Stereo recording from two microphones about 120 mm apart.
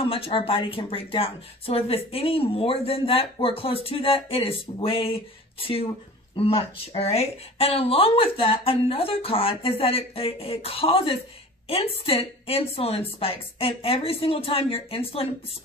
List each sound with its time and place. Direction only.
0.0 s speech: 50° left (ahead or behind)